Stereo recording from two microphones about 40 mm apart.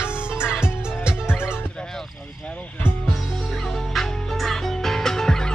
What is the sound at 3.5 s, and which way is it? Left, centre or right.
Music, centre.